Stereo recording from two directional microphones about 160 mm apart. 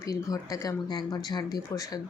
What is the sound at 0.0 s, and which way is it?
Speech, 20° left (ahead or behind).